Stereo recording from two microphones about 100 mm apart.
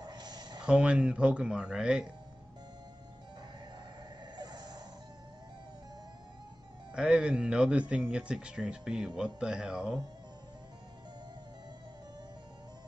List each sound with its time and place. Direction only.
0.0 s a sound: 45° right (ahead or behind)
0.7 s speech: 10° right (ahead or behind)
4.4 s music: 45° right (ahead or behind)
6.9 s speech: 10° right (ahead or behind)